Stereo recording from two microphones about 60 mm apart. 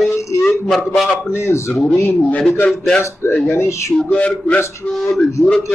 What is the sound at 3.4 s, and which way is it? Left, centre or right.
Speech, left.